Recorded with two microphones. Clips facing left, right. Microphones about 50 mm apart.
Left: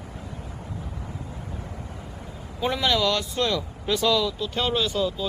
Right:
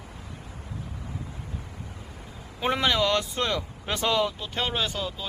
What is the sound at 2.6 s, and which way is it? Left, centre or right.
Speech, right.